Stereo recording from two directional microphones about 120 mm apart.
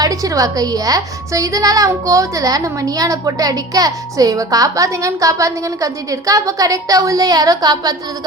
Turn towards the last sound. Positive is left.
turn(degrees=-35)  # may be behind; listen again after turning